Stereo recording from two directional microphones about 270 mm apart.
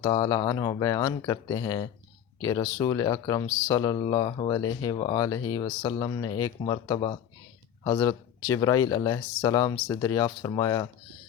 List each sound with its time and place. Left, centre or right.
0.0 s speech: centre